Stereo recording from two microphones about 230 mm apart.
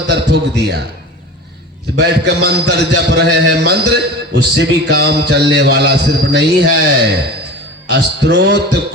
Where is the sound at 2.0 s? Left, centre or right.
Right.